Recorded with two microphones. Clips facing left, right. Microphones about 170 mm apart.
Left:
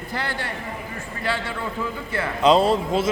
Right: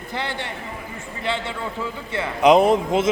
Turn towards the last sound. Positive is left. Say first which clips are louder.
# right 3 dB
turn(degrees=-20)  # may be behind; listen again after turning